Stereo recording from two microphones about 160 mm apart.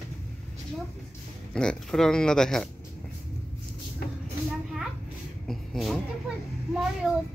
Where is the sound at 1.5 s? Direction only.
5° left (ahead or behind).